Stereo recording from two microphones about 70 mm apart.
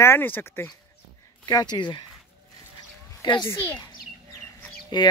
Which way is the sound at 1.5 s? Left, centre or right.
Left.